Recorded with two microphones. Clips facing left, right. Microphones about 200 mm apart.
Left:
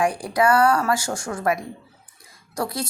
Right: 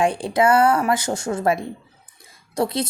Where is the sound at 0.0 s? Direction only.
25° right (ahead or behind).